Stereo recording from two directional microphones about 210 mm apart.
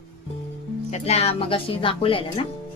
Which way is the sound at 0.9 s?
30° left (ahead or behind).